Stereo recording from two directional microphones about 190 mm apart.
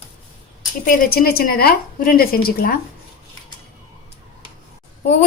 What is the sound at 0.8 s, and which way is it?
A woman's voice, 50° left (ahead or behind).